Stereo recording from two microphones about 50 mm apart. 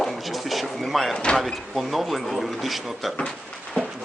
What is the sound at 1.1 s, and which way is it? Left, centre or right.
Speech, centre.